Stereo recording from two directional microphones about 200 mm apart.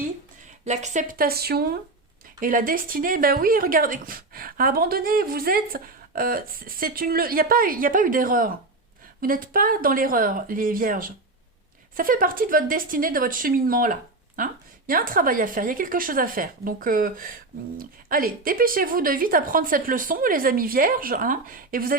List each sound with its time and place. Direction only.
0.6 s speech: 35° right (ahead or behind)